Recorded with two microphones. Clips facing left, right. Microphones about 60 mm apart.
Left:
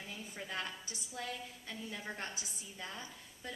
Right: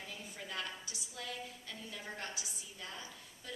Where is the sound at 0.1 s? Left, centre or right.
Left.